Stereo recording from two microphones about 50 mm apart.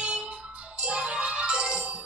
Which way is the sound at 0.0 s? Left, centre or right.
Right.